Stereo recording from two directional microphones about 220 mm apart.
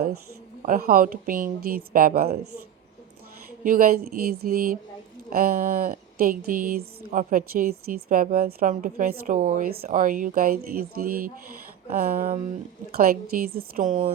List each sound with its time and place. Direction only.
0.6 s speech: 40° right (ahead or behind)
3.6 s speech: 40° right (ahead or behind)